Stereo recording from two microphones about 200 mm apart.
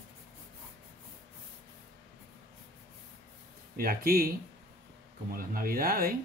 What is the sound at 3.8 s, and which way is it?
Speech, 50° right (ahead or behind).